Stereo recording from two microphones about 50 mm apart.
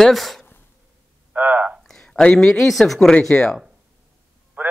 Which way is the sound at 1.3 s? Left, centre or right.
Right.